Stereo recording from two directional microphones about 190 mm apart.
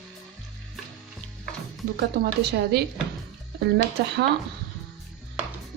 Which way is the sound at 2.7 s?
55° right (ahead or behind).